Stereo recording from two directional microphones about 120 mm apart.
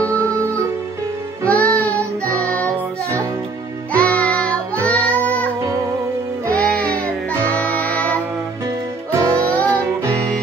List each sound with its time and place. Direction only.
1.4 s music: 10° left (ahead or behind)
3.9 s music: 10° left (ahead or behind)
5.6 s music: 25° right (ahead or behind)
6.5 s music: 10° left (ahead or behind)
8.6 s music: 25° right (ahead or behind)
9.3 s music: 10° left (ahead or behind)